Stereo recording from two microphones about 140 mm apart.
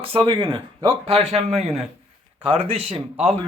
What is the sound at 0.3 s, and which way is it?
Speech, 40° right (ahead or behind).